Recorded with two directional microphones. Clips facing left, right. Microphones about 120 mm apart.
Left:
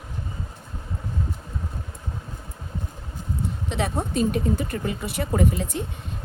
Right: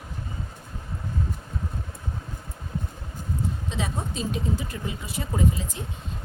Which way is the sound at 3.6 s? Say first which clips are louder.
Left 4 dB; 60° left (ahead or behind).